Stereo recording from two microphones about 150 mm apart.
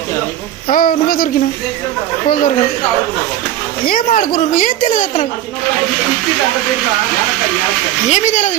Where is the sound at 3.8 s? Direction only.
70° left (ahead or behind).